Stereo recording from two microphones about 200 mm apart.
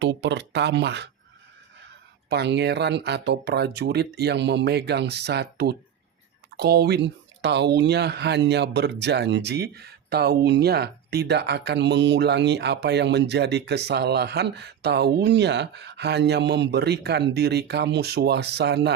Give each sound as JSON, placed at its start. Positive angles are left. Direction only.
{"t": 0.0, "sound": "speech", "side_deg": -60}
{"t": 2.3, "sound": "speech", "side_deg": -60}